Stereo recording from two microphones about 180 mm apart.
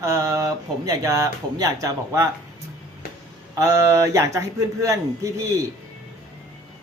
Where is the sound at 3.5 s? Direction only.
20° right (ahead or behind).